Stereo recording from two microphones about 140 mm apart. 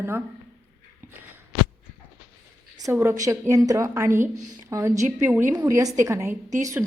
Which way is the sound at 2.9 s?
20° right (ahead or behind).